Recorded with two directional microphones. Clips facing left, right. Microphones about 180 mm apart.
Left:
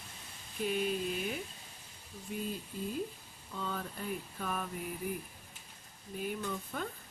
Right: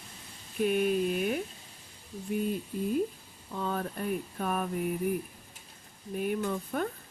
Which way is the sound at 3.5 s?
55° right (ahead or behind).